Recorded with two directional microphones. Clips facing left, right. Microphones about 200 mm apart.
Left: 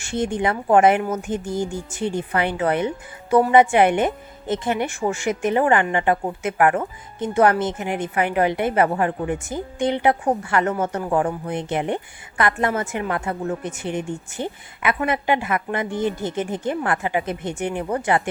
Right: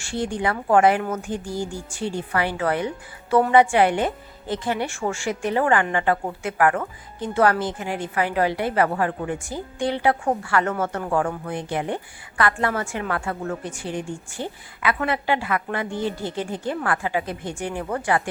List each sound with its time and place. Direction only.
0.0 s a woman's voice: 20° left (ahead or behind)